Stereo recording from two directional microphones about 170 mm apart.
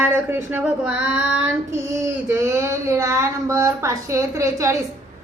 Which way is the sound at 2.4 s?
15° right (ahead or behind).